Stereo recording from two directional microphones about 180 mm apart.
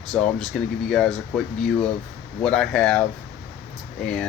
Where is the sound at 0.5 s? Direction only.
5° left (ahead or behind).